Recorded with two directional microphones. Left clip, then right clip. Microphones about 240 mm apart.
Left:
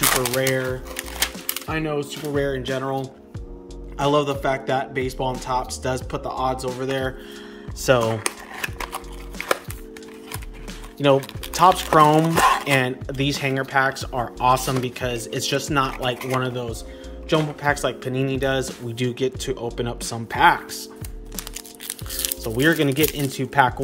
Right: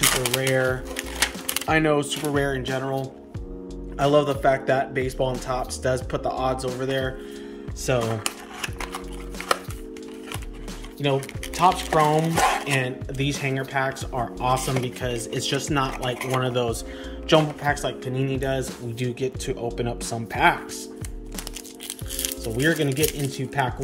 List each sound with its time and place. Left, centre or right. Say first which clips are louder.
0.0 s speech: left 2 dB; centre
1.7 s speech: right 5 dB; centre
2.3 s speech: left 3 dB; centre
7.8 s a sound: left 6 dB; centre
11.1 s speech: left 5 dB; centre
22.2 s speech: left 3 dB; centre